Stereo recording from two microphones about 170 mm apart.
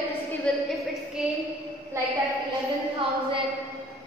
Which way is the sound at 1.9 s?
15° right (ahead or behind).